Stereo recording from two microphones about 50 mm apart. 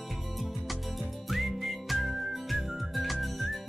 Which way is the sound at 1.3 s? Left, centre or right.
Centre.